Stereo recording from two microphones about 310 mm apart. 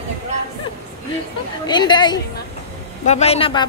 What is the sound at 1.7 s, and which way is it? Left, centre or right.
Speech, centre.